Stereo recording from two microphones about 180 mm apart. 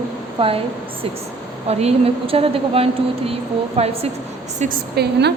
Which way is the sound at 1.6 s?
35° right (ahead or behind).